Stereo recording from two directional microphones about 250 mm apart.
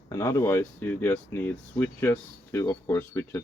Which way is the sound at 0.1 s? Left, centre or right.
Centre.